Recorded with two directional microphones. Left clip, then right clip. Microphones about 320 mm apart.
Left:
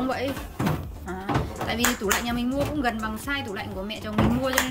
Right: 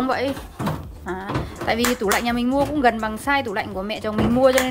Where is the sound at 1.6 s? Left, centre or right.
Centre.